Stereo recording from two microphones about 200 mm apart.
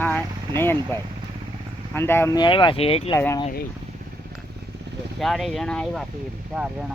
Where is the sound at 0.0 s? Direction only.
10° left (ahead or behind).